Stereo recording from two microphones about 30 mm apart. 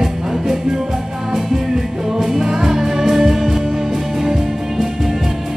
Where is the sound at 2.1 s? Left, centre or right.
Centre.